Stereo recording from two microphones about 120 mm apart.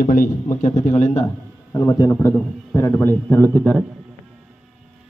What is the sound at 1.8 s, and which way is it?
A man's voice, 30° left (ahead or behind).